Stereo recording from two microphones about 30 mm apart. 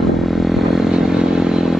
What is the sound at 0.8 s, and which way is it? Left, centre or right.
Vehicle, centre.